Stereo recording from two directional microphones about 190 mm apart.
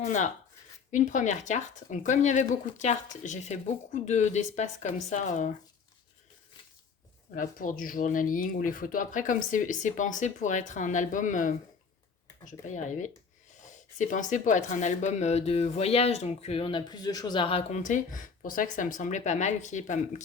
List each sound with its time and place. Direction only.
0.0 s speech: 40° left (ahead or behind)
7.3 s speech: 45° left (ahead or behind)